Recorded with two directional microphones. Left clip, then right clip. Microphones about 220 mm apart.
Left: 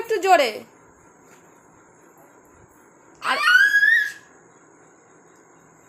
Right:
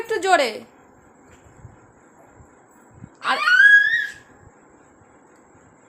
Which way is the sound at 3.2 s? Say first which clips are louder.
Right 1 dB; centre (ahead or behind).